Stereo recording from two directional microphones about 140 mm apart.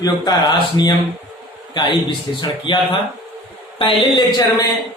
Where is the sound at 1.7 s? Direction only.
35° left (ahead or behind).